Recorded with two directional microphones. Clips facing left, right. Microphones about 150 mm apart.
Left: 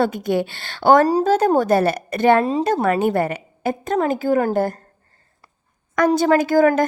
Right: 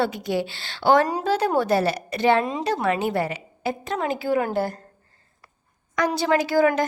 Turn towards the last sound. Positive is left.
turn(degrees=45)  # may be behind; listen again after turning